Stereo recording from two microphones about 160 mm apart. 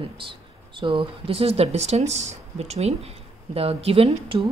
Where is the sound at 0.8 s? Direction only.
30° right (ahead or behind).